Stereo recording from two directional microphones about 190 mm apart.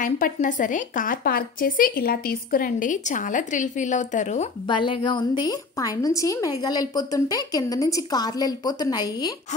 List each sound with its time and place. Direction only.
0.0 s a woman's voice: 40° left (ahead or behind)
4.6 s a woman's voice: 25° left (ahead or behind)